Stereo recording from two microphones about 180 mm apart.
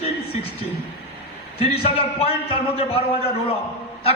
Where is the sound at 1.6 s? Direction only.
30° left (ahead or behind).